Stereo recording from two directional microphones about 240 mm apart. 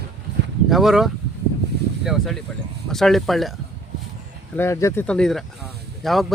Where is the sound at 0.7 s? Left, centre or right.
Centre.